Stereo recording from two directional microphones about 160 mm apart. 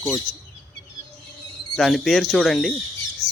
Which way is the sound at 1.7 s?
Centre (ahead or behind).